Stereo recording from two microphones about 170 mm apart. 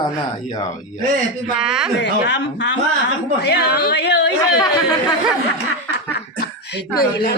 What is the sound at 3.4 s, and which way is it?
Speech, 75° left (ahead or behind).